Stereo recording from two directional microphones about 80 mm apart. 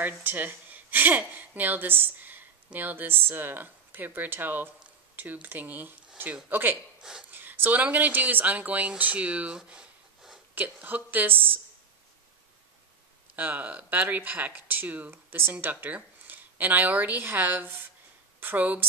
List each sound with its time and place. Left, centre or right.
0.0 s a woman's voice: right
7.0 s a sound: centre
7.2 s speech: right
9.7 s a sound: centre
10.5 s speech: right
13.4 s speech: right